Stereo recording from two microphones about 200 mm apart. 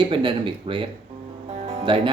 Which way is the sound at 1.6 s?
25° right (ahead or behind).